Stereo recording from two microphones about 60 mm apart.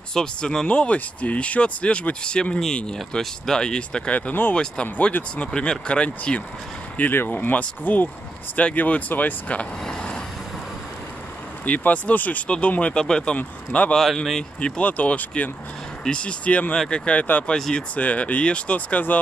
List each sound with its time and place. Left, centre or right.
0.1 s speech: centre
4.3 s speech: left
7.0 s speech: left; by 10.2 s centre
11.6 s speech: left
13.9 s speech: centre
14.6 s speech: left
17.6 s speech: centre
17.9 s speech: left